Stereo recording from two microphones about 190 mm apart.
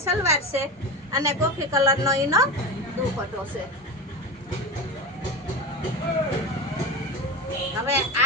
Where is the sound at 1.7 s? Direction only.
15° right (ahead or behind).